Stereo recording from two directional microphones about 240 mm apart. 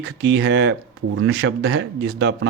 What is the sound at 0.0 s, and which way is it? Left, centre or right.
Speech, right.